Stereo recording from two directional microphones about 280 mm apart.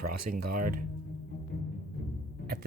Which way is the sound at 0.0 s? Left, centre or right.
Right.